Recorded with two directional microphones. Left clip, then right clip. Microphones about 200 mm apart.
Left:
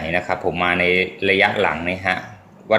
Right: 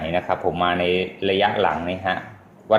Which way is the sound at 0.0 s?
10° left (ahead or behind).